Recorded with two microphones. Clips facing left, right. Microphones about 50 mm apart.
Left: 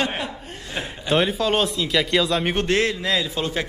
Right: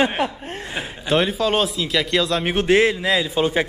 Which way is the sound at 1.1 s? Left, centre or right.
Centre.